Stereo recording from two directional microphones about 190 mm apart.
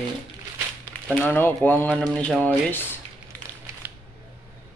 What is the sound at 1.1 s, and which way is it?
Speech, 10° left (ahead or behind).